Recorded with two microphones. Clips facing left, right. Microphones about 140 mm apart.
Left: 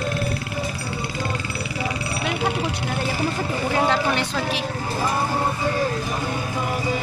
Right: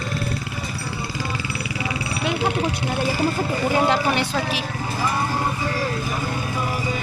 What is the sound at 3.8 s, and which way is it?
Speech, 15° right (ahead or behind).